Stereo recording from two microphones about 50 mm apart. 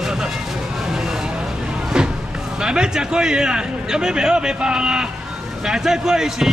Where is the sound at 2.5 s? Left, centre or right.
Centre.